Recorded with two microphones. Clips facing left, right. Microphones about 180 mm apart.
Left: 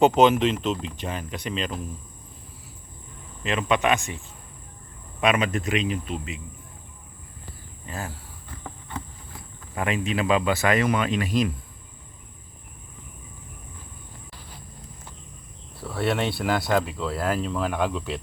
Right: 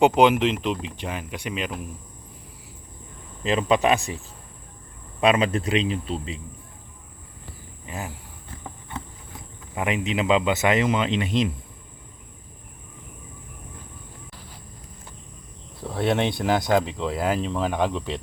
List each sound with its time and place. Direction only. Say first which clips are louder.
0.0 s speech: even; 15° right (ahead or behind)
3.4 s speech: right 3 dB; 35° right (ahead or behind)
5.2 s speech: right 3 dB; 30° right (ahead or behind)
7.9 s speech: even; 15° right (ahead or behind)
9.7 s speech: right 1 dB; 20° right (ahead or behind)
15.8 s speech: right 2 dB; 20° right (ahead or behind)